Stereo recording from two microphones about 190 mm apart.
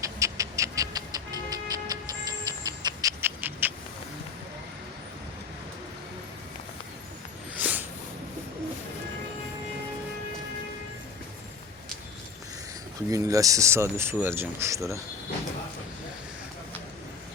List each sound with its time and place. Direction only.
0.0 s music: 15° right (ahead or behind)
7.5 s a sound: 10° right (ahead or behind)
13.1 s speech: 15° right (ahead or behind)